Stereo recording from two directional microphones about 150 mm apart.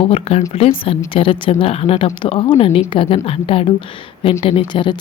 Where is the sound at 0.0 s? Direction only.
40° left (ahead or behind).